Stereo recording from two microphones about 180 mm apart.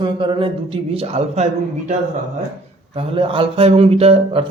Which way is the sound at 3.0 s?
30° right (ahead or behind).